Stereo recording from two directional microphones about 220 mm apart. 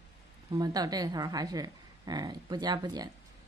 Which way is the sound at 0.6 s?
15° right (ahead or behind).